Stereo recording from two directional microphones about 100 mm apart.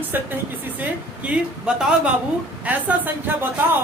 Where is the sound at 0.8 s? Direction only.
10° right (ahead or behind).